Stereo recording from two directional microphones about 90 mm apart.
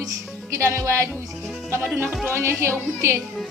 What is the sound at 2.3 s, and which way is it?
Speech, 25° right (ahead or behind).